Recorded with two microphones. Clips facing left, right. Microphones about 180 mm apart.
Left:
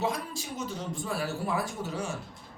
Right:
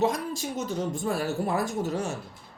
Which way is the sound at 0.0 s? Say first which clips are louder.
Right 6 dB; 45° right (ahead or behind).